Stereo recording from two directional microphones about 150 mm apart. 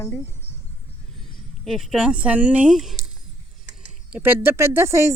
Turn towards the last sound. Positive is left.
turn(degrees=-20)  # may be behind; listen again after turning